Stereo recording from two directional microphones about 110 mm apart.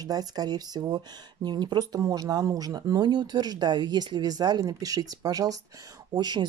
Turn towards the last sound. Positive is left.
turn(degrees=-40)  # may be behind; listen again after turning